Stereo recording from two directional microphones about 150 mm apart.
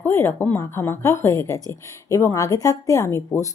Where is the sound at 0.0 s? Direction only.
15° left (ahead or behind).